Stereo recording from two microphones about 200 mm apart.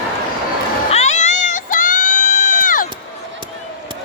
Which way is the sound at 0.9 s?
35° left (ahead or behind).